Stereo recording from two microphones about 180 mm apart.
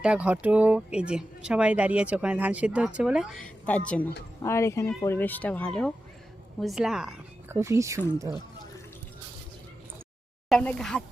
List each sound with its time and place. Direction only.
0.0 s a woman's voice: 5° right (ahead or behind)
7.5 s speech: 15° right (ahead or behind)
10.5 s speech: 5° left (ahead or behind)